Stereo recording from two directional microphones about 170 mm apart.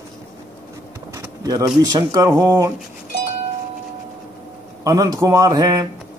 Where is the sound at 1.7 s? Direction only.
20° right (ahead or behind).